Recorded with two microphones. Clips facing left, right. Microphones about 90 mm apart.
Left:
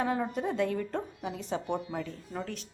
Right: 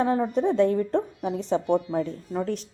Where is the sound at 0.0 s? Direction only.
30° right (ahead or behind).